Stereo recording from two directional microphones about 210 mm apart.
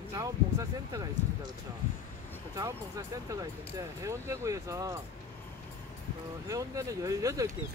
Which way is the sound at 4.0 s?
15° right (ahead or behind).